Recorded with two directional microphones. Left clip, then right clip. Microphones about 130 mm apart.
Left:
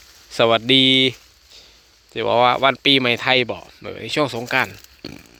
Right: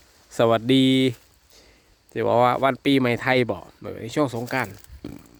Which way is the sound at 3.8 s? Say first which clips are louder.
Left 4 dB; 25° right (ahead or behind).